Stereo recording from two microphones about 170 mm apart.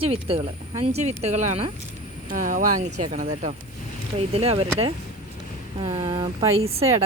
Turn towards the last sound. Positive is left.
turn(degrees=-35)  # may be behind; listen again after turning